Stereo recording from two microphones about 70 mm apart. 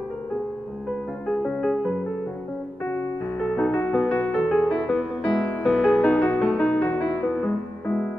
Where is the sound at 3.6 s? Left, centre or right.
Centre.